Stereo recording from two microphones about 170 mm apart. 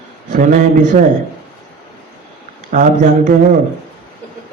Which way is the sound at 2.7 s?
50° right (ahead or behind).